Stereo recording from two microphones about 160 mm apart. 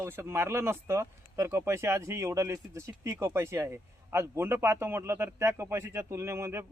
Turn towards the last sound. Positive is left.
turn(degrees=-15)  # may be behind; listen again after turning